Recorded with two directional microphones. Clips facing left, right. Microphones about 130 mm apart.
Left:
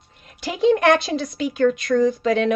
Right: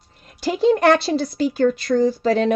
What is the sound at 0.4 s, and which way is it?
Speech, 35° right (ahead or behind).